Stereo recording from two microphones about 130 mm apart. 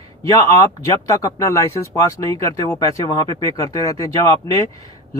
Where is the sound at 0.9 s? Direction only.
25° left (ahead or behind).